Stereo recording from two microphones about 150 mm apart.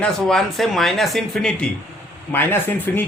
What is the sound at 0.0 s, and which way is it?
Speech, 5° left (ahead or behind).